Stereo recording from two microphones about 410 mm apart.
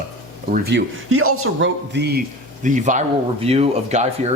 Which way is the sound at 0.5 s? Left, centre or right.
Right.